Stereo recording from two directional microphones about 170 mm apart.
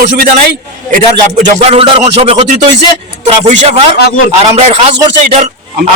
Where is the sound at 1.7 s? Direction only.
40° right (ahead or behind).